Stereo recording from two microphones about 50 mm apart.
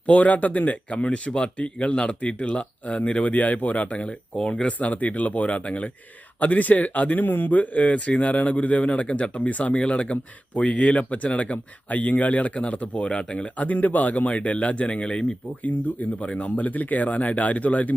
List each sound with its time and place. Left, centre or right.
0.0 s speech: left
4.4 s speech: centre
4.8 s speech: left